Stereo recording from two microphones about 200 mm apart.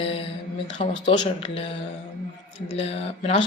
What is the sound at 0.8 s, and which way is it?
Speech, 30° left (ahead or behind).